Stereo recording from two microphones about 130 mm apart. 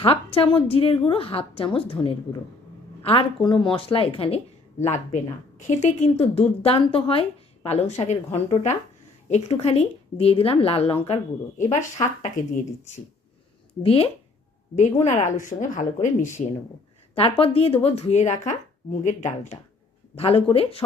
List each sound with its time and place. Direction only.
0.0 s a woman's voice: 45° left (ahead or behind)
4.8 s a woman's voice: 65° left (ahead or behind); by 11.2 s 50° left (ahead or behind)
11.5 s speech: 70° left (ahead or behind)
13.8 s a woman's voice: 45° left (ahead or behind)
14.8 s speech: 65° left (ahead or behind)
17.4 s speech: 50° left (ahead or behind); by 19.5 s 65° left (ahead or behind)
20.1 s a woman's voice: 50° left (ahead or behind)